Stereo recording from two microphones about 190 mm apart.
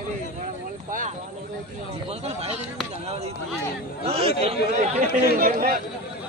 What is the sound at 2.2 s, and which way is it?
A man's voice, 30° right (ahead or behind).